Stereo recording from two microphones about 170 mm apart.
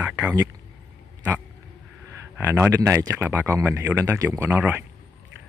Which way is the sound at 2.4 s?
15° right (ahead or behind).